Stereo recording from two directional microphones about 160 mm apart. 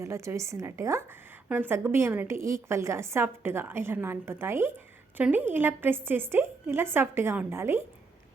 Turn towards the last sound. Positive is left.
turn(degrees=-15)  # may be behind; listen again after turning